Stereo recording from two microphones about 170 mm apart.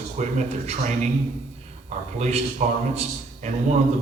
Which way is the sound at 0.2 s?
45° right (ahead or behind).